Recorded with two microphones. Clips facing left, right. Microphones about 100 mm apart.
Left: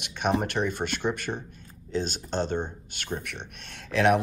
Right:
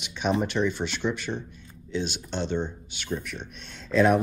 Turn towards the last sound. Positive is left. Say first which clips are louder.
# right 1 dB
turn(degrees=70)  # may be behind; listen again after turning